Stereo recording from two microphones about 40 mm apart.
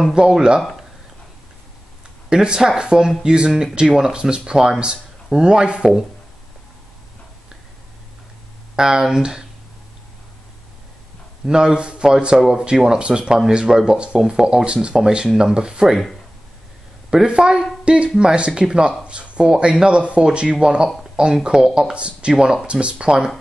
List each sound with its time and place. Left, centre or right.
0.2 s speech: right
2.2 s speech: right
5.8 s speech: centre
8.7 s speech: centre
11.4 s speech: centre
13.2 s speech: centre
13.5 s speech: centre
17.3 s speech: right
19.5 s speech: centre
20.6 s speech: centre
21.9 s speech: right
22.3 s speech: centre
22.7 s speech: right